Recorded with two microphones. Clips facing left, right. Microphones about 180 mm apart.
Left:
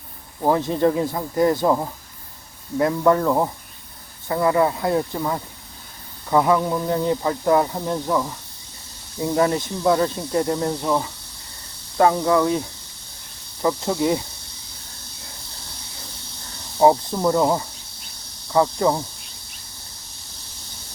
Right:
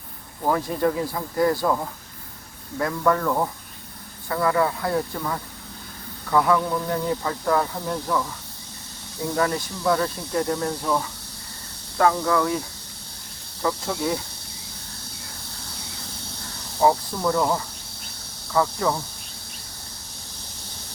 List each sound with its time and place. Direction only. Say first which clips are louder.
0.4 s speech: left 4 dB; 25° left (ahead or behind)
9.3 s speech: left 4 dB; 25° left (ahead or behind)
13.6 s speech: left 5 dB; 20° left (ahead or behind)
16.8 s speech: left 4 dB; 25° left (ahead or behind)